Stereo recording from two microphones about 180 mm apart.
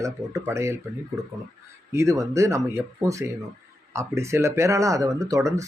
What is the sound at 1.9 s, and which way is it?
Speech, 15° right (ahead or behind).